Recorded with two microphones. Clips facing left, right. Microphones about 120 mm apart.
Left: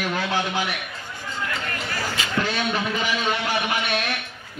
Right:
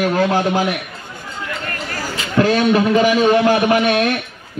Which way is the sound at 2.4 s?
45° right (ahead or behind).